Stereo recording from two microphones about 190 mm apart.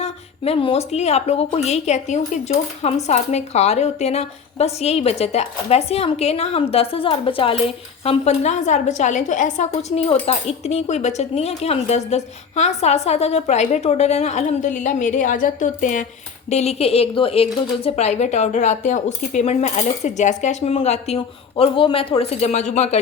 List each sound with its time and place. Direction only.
0.0 s a woman's voice: 30° left (ahead or behind)